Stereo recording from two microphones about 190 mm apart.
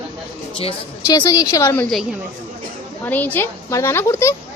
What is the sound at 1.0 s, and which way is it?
Speech, 15° left (ahead or behind).